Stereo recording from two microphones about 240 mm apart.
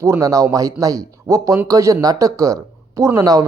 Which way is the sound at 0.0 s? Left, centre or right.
Centre.